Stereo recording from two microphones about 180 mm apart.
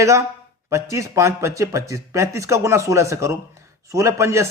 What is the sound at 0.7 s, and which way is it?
Speech, 15° right (ahead or behind).